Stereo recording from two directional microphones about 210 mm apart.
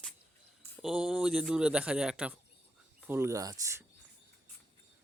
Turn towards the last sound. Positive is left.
turn(degrees=-15)  # may be behind; listen again after turning